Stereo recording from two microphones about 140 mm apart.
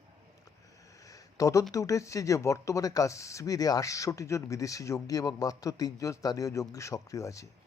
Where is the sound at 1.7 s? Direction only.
25° left (ahead or behind).